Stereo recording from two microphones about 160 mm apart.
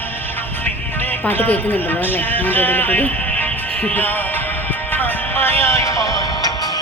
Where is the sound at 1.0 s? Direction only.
10° left (ahead or behind).